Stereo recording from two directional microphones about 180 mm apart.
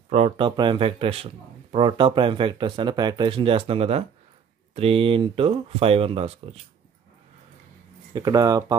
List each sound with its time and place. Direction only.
0.1 s a man's voice: 30° right (ahead or behind)
8.1 s a man's voice: 20° right (ahead or behind)